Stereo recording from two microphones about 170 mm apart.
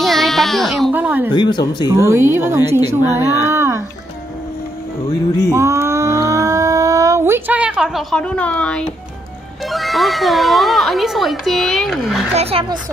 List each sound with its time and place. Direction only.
0.0 s music: centre (ahead or behind)
0.9 s speech: 10° right (ahead or behind)
1.3 s speech: 25° left (ahead or behind)
2.0 s speech: 15° right (ahead or behind)
5.5 s a sound: 15° right (ahead or behind); by 8.8 s 5° left (ahead or behind)
9.7 s speech: centre (ahead or behind)
12.4 s speech: 35° right (ahead or behind)